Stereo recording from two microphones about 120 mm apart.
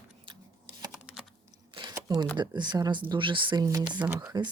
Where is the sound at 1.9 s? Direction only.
35° right (ahead or behind).